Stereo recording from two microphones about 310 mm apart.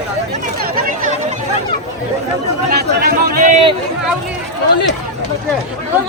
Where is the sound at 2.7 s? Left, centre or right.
Right.